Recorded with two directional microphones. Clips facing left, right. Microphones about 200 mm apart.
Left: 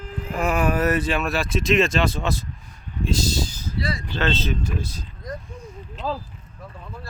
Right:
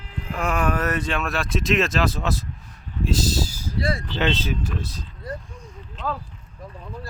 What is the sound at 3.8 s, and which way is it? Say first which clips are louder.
Speech: right 3 dB; 50° right (ahead or behind).